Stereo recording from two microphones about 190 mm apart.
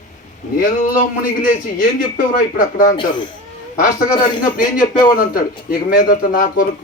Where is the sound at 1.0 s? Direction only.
45° left (ahead or behind).